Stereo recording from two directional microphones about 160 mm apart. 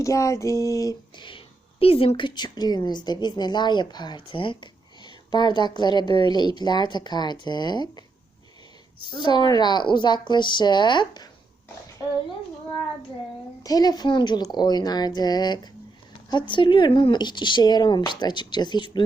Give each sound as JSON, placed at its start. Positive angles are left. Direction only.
{"t": 0.0, "sound": "a woman's voice", "side_deg": 20}
{"t": 9.1, "sound": "a woman's voice", "side_deg": 30}
{"t": 13.6, "sound": "a woman's voice", "side_deg": 25}